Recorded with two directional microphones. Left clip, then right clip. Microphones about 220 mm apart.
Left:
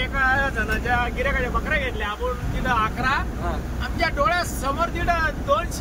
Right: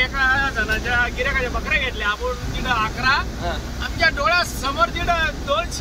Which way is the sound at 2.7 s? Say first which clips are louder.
Right 3 dB; 20° left (ahead or behind).